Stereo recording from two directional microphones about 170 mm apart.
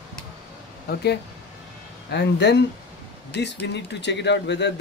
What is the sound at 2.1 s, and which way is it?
Speech, 85° left.